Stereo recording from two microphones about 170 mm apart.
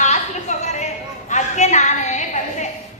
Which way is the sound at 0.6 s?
45° left (ahead or behind).